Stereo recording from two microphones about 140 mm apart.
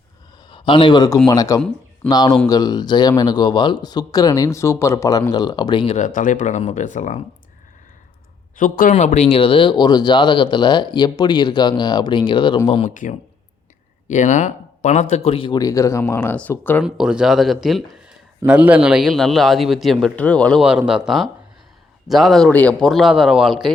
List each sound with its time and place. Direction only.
0.5 s a man's voice: 35° left (ahead or behind)
6.1 s speech: 65° left (ahead or behind)
8.5 s speech: 75° left (ahead or behind)
9.0 s speech: 55° left (ahead or behind)
12.9 s speech: 65° left (ahead or behind); by 15.5 s 40° left (ahead or behind)
15.5 s speech: 25° left (ahead or behind)
16.8 s a man's voice: 5° right (ahead or behind)
20.6 s a man's voice: 5° right (ahead or behind)